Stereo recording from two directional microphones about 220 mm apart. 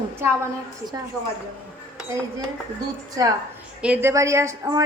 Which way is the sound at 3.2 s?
15° right (ahead or behind).